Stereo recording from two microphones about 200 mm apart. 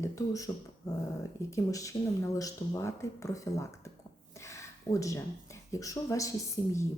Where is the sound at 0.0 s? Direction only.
15° left (ahead or behind).